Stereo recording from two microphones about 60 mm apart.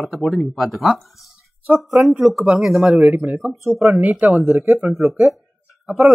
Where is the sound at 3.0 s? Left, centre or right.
Right.